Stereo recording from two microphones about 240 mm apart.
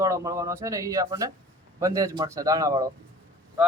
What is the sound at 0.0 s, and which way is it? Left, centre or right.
Speech, centre.